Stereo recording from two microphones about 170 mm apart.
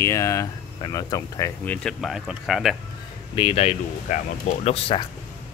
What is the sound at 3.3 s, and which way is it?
Speech, 35° left (ahead or behind).